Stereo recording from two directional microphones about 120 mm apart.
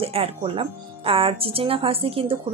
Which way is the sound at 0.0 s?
55° right (ahead or behind).